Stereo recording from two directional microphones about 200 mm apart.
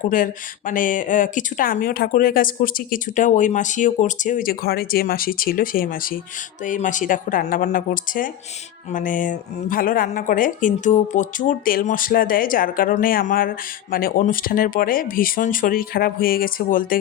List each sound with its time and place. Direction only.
0.1 s a woman's voice: 40° left (ahead or behind)